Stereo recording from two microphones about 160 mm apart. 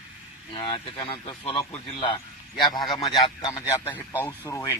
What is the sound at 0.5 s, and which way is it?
A man's voice, 35° left (ahead or behind).